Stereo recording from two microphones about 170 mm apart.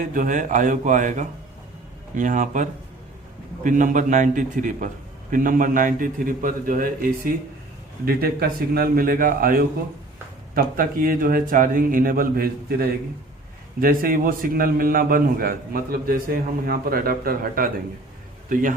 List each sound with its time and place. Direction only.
0.0 s a man's voice: 50° right (ahead or behind)